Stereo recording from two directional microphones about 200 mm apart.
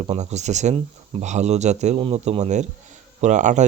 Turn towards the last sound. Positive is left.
turn(degrees=-35)  # may be behind; listen again after turning